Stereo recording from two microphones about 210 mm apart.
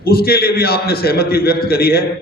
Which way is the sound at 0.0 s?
45° left (ahead or behind).